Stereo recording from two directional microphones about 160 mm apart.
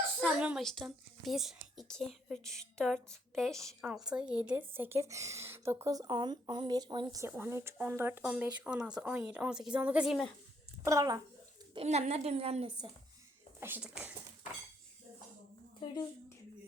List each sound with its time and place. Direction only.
0.3 s a woman's voice: 5° right (ahead or behind); by 7.3 s 25° right (ahead or behind)
7.3 s a woman's voice: 15° right (ahead or behind)
10.8 s speech: 20° right (ahead or behind)
11.7 s a woman's voice: 40° right (ahead or behind)
13.6 s a woman's voice: 10° right (ahead or behind)